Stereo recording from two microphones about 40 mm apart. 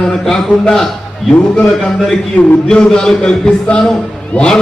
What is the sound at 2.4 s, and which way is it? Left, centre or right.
Speech, left.